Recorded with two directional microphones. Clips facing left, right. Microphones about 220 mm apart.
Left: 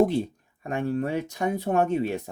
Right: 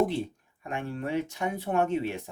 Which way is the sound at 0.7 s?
40° left (ahead or behind).